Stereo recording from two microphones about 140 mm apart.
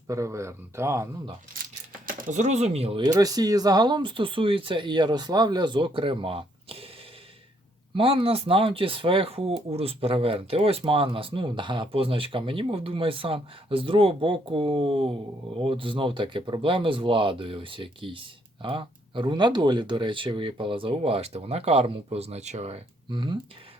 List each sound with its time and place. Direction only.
0.1 s speech: 20° right (ahead or behind)
1.5 s coin: 90° right
2.0 s speech: 60° right (ahead or behind)
3.0 s speech: 25° right (ahead or behind)
7.9 s speech: 40° right (ahead or behind)
23.0 s speech: 35° right (ahead or behind)